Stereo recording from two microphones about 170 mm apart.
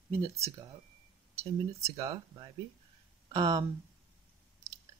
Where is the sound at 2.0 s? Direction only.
20° right (ahead or behind).